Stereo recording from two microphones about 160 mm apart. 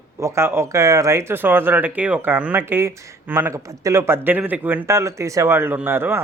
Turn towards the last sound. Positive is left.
turn(degrees=-10)  # may be behind; listen again after turning